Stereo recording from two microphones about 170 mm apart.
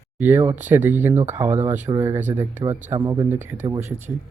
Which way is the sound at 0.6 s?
10° right (ahead or behind).